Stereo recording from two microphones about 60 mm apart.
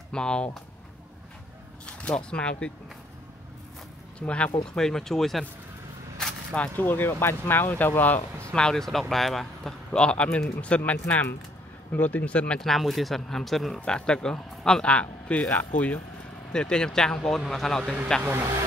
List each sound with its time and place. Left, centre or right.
0.1 s speech: centre
1.9 s speech: left
4.2 s speech: centre
6.8 s speech: left
8.5 s speech: centre
12.5 s speech: centre
13.7 s speech: centre
16.5 s speech: centre
18.2 s speech: right